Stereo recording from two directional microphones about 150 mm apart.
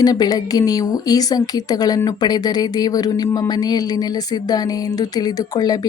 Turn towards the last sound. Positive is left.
turn(degrees=25)  # may be behind; listen again after turning